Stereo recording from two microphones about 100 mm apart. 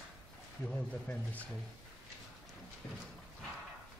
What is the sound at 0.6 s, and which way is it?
Speech, 15° left (ahead or behind).